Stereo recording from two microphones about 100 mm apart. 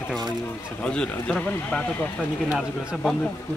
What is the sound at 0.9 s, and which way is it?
A man's voice, 10° left (ahead or behind).